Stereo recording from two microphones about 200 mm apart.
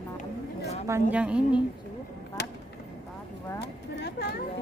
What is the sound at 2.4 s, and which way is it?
Chop, 55° left (ahead or behind).